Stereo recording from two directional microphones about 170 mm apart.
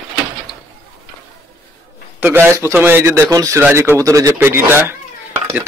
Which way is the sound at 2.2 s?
15° right (ahead or behind).